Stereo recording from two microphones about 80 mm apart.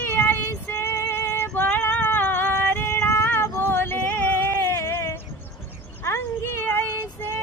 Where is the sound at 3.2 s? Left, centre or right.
Left.